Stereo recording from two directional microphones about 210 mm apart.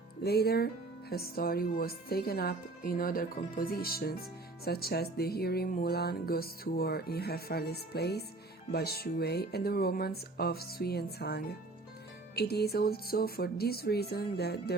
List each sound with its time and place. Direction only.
0.2 s speech: 50° left (ahead or behind)